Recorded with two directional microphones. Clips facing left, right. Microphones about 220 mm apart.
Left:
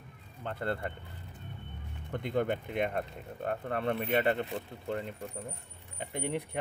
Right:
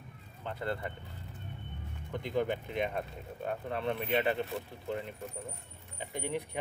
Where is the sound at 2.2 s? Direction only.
55° left (ahead or behind).